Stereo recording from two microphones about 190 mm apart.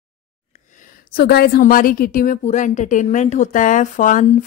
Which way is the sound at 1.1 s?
55° left (ahead or behind).